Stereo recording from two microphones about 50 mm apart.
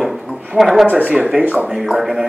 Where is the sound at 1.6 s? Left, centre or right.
Centre.